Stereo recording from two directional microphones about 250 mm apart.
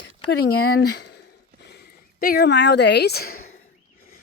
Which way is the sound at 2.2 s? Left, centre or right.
Left.